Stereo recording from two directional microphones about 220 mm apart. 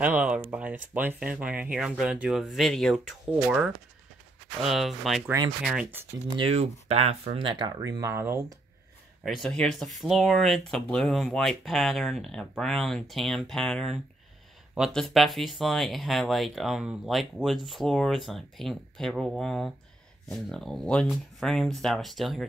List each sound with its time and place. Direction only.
0.0 s speech: 10° right (ahead or behind)
6.3 s speech: 25° right (ahead or behind)
9.2 s speech: centre (ahead or behind)